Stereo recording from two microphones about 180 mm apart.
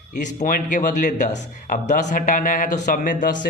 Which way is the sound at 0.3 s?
45° left (ahead or behind).